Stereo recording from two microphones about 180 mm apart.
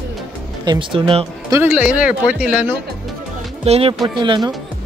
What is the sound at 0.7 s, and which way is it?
Speech, 30° right (ahead or behind).